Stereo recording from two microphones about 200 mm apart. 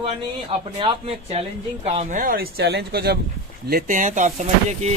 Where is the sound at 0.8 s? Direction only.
25° right (ahead or behind); by 3.2 s 55° right (ahead or behind).